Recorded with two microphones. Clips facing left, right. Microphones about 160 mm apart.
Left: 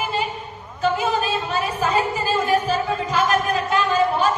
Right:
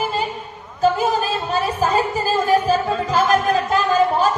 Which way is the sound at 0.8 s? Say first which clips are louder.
Right 3 dB; 35° right (ahead or behind).